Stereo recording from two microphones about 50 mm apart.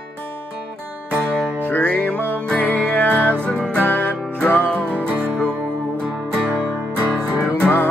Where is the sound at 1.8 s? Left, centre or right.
Left.